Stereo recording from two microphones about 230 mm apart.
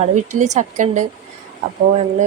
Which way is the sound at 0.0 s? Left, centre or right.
Right.